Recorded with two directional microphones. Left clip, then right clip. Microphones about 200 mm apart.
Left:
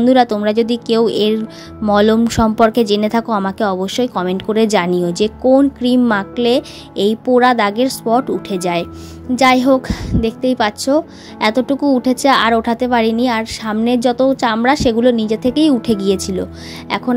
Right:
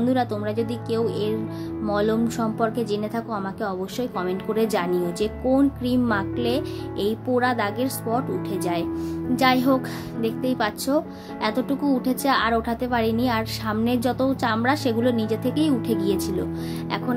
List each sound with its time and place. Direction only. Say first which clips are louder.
0.0 s a woman's voice: left 12 dB; 35° left (ahead or behind)